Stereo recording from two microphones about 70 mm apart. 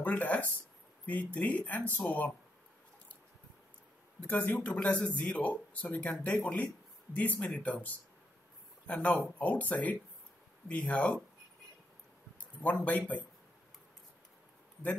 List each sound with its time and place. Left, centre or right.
0.0 s speech: left
4.2 s speech: left
12.6 s speech: left